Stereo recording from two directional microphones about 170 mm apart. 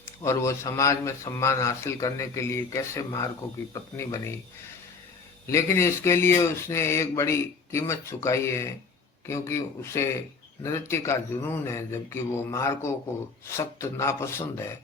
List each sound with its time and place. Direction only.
0.3 s a man's voice: 15° left (ahead or behind)
5.5 s a man's voice: 15° left (ahead or behind)